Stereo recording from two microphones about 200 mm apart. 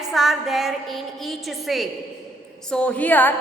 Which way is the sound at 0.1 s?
Centre (ahead or behind).